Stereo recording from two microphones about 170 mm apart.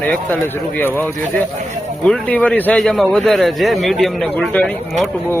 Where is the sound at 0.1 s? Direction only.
10° left (ahead or behind).